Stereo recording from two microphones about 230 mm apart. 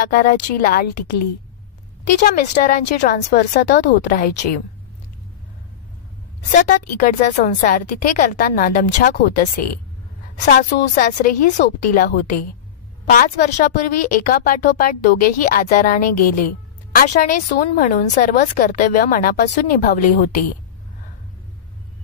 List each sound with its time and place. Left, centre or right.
0.1 s a woman's voice: left
2.1 s a woman's voice: left
3.3 s a woman's voice: left
6.5 s a woman's voice: left